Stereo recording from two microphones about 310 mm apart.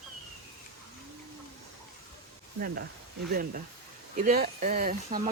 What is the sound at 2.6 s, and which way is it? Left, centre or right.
Speech, right.